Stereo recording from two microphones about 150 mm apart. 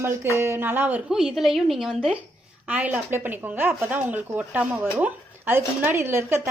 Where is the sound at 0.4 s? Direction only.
15° right (ahead or behind).